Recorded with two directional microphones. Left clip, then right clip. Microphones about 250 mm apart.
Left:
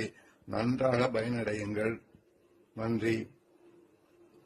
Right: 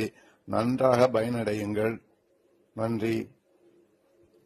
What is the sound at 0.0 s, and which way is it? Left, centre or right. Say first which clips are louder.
A man's voice: right 6 dB; right.